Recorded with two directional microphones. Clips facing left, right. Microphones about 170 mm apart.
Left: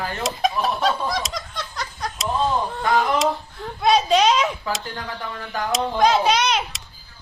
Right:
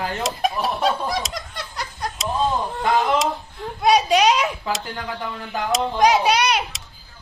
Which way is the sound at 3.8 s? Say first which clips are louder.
Right 1 dB; 10° right (ahead or behind).